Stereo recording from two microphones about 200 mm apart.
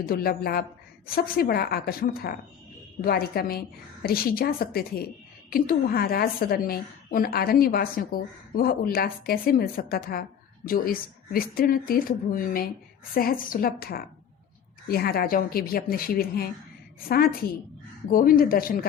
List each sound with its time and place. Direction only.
0.0 s a woman's voice: 50° left (ahead or behind)